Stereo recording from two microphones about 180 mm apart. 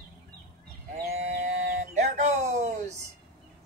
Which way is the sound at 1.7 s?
40° right (ahead or behind).